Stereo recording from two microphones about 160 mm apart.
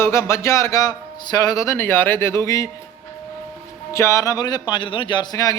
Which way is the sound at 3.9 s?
20° left (ahead or behind).